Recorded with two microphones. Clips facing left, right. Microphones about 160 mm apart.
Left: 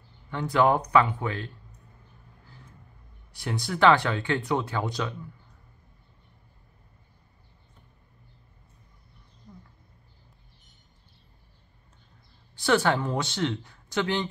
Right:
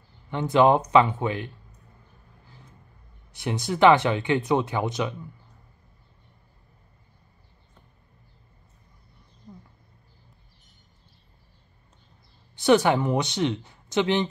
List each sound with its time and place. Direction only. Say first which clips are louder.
0.3 s speech: right 4 dB; 20° right (ahead or behind)
3.3 s speech: right 3 dB; 20° right (ahead or behind)
12.5 s speech: right 4 dB; 20° right (ahead or behind)